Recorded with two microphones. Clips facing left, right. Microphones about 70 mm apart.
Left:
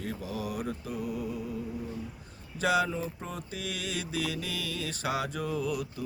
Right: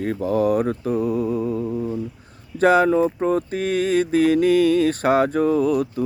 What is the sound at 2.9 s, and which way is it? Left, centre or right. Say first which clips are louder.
Mantra: right 18 dB; right.